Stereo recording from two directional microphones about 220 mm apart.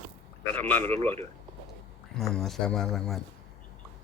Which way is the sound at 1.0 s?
30° right (ahead or behind).